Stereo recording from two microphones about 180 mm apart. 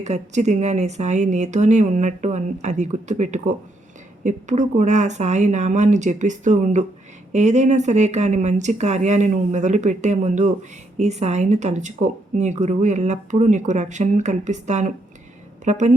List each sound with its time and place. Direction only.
0.0 s a woman's voice: 40° right (ahead or behind)